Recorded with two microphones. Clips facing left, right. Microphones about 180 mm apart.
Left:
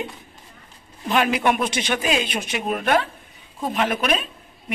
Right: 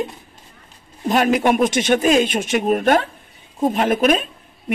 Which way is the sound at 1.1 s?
40° right (ahead or behind).